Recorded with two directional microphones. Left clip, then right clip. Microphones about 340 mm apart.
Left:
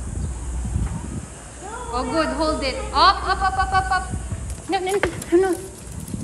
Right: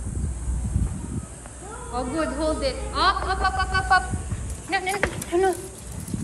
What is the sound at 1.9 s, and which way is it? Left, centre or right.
A man's voice, centre.